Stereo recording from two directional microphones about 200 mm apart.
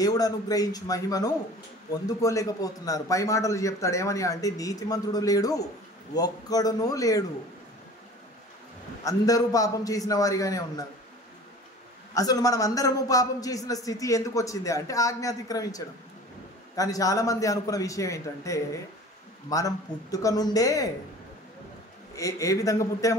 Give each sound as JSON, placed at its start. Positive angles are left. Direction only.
{"t": 0.0, "sound": "a man's voice", "side_deg": 20}
{"t": 9.0, "sound": "a man's voice", "side_deg": 15}
{"t": 12.1, "sound": "a man's voice", "side_deg": 15}
{"t": 22.1, "sound": "a man's voice", "side_deg": 15}